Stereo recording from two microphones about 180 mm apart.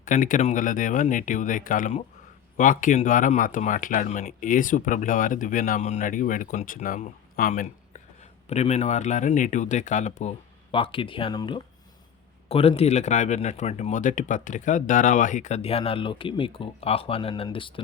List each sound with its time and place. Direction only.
0.0 s speech: 45° left (ahead or behind); by 17.8 s 30° left (ahead or behind)